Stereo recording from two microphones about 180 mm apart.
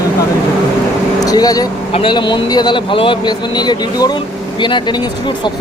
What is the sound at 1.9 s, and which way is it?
Speech, 30° left (ahead or behind).